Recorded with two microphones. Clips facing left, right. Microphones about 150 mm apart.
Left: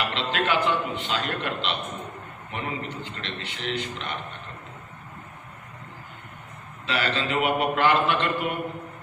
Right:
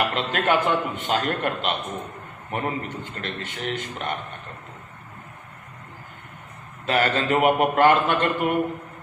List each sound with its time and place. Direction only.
0.1 s a man's voice: 45° right (ahead or behind)
6.8 s a man's voice: 45° right (ahead or behind)